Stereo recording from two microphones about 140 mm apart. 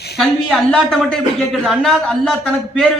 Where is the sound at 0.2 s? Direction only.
5° left (ahead or behind).